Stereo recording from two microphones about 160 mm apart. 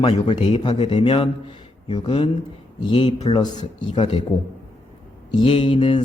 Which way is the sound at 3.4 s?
30° left (ahead or behind).